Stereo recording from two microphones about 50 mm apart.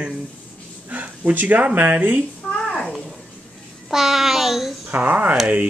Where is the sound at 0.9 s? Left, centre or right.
Right.